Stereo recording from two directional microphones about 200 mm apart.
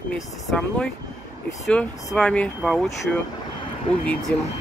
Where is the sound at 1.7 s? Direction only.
5° left (ahead or behind).